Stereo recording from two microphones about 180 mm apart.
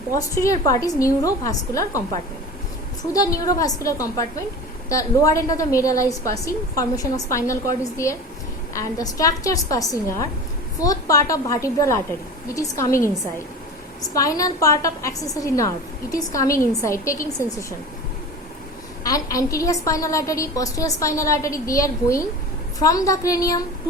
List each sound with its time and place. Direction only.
0.1 s a woman's voice: 15° left (ahead or behind)
3.1 s a woman's voice: 20° left (ahead or behind)
19.0 s a woman's voice: 20° left (ahead or behind)